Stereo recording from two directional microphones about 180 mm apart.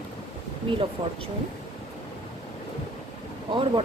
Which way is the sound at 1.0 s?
25° right (ahead or behind).